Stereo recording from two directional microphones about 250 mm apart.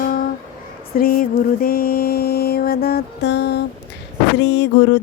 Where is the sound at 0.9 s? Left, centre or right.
Left.